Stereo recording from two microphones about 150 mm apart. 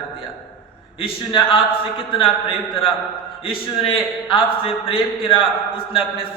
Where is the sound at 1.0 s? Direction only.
35° left (ahead or behind).